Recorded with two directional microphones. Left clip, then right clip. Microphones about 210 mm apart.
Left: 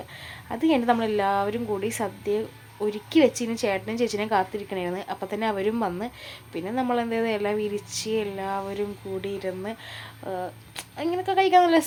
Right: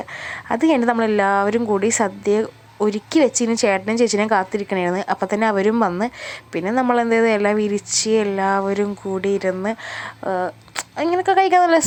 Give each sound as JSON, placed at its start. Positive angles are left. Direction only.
{"t": 0.3, "sound": "a woman's voice", "side_deg": -25}